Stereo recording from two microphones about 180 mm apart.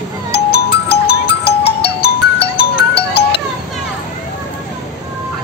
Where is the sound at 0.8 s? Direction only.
65° left (ahead or behind).